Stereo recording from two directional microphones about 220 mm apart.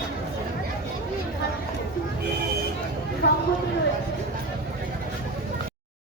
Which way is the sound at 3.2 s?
55° left (ahead or behind).